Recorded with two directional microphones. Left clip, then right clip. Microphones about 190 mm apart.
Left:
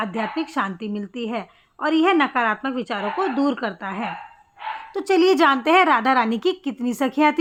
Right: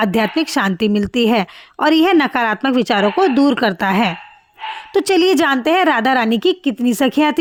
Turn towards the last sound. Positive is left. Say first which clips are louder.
# right 4 dB
turn(degrees=-40)  # may be behind; listen again after turning